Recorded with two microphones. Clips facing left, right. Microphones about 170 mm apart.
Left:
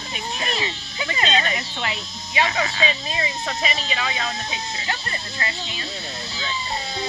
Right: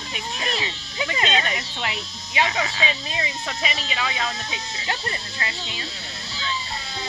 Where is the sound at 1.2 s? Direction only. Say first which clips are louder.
Left 3 dB; 10° right (ahead or behind).